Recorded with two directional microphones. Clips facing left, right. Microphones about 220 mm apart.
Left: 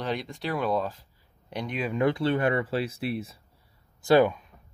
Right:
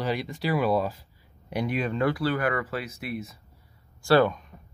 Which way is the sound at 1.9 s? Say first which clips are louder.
Left 4 dB; 20° left (ahead or behind).